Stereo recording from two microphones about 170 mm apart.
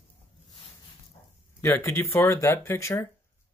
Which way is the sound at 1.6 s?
15° left (ahead or behind).